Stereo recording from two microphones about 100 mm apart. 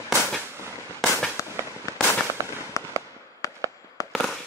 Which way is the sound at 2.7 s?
30° left (ahead or behind).